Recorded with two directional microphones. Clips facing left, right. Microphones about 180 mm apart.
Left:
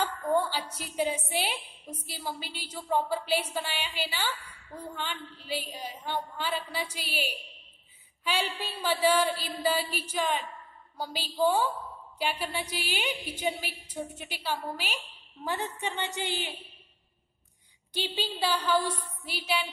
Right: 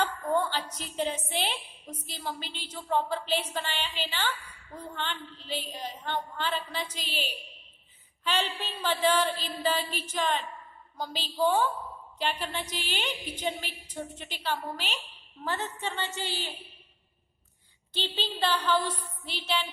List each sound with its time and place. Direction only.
0.0 s a woman's voice: 10° left (ahead or behind)
17.9 s a woman's voice: 10° left (ahead or behind)